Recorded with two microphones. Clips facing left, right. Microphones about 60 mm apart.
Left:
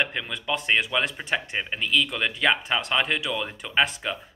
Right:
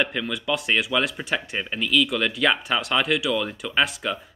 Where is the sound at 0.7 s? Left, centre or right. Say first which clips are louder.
Left 1 dB; centre.